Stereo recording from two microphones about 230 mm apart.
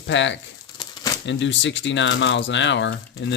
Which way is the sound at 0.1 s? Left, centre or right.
Left.